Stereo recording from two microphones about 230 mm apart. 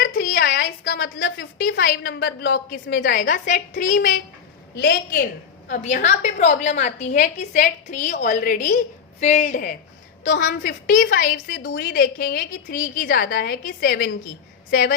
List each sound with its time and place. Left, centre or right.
0.0 s a woman's voice: left
5.6 s a woman's voice: left
11.5 s a woman's voice: left
11.9 s a woman's voice: left